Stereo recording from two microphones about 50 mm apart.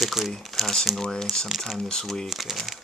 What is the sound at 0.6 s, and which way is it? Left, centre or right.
Speech, centre.